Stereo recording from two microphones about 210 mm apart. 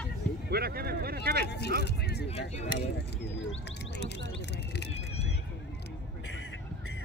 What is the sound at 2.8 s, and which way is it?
Speech, 50° left (ahead or behind).